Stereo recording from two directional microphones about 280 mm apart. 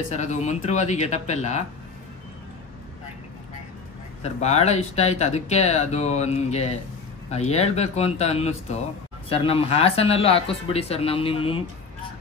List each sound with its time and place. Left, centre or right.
0.1 s speech: left
4.2 s speech: left